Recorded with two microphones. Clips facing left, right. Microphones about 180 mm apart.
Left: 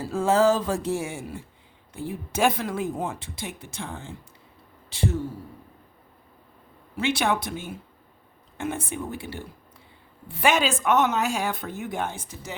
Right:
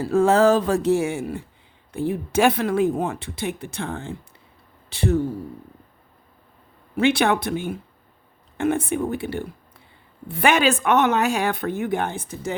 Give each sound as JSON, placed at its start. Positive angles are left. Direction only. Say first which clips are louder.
{"t": 0.0, "sound": "speech", "louder": "right 4 dB", "side_deg": -65}
{"t": 6.9, "sound": "speech", "louder": "right 6 dB", "side_deg": -60}